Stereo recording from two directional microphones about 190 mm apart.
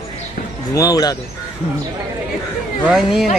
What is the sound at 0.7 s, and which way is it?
Speech, 20° left (ahead or behind).